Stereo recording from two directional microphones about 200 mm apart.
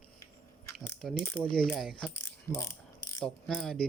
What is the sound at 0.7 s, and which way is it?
Speech, centre (ahead or behind).